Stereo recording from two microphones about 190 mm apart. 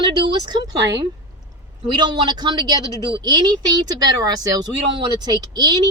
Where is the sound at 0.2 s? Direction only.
20° right (ahead or behind).